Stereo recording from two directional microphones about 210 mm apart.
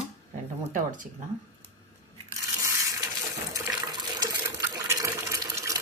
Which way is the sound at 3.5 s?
15° right (ahead or behind).